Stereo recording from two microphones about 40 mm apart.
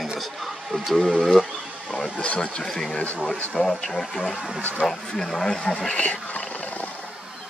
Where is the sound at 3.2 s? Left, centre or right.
Left.